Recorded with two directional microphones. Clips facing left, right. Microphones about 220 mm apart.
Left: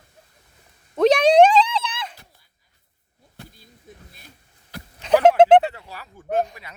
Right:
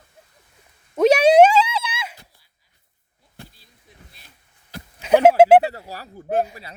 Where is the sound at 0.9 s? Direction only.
10° right (ahead or behind).